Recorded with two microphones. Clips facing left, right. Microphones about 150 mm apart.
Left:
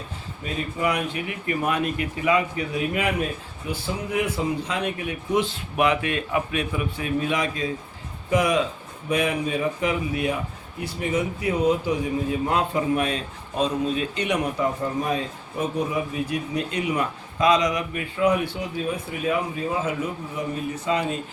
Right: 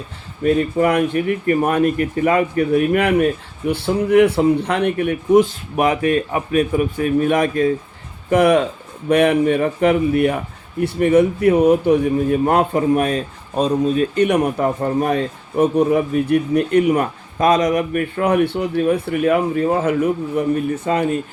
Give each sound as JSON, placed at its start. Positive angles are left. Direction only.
{"t": 0.4, "sound": "a man's voice", "side_deg": -50}